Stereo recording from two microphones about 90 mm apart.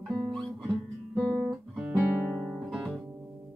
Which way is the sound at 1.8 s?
10° right (ahead or behind).